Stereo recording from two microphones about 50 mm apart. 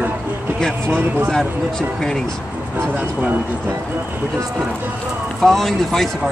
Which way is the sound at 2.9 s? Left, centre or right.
Right.